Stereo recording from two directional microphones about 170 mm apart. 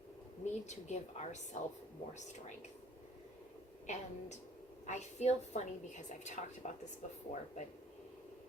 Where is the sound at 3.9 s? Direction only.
40° left (ahead or behind).